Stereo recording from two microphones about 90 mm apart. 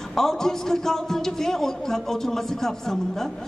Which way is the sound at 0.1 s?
5° left (ahead or behind).